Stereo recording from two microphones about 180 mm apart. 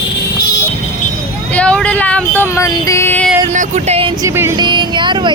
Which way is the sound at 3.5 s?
40° right (ahead or behind).